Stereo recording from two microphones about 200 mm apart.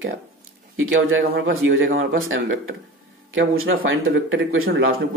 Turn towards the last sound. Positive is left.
turn(degrees=-80)